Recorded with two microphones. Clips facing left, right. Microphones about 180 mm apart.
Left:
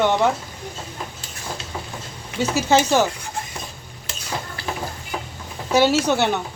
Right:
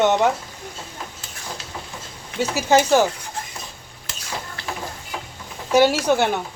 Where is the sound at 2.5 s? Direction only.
10° right (ahead or behind).